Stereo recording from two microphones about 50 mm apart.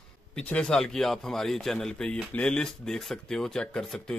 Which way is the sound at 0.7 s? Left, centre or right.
Centre.